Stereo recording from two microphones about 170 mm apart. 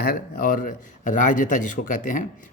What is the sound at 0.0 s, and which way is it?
A man's voice, 55° left (ahead or behind).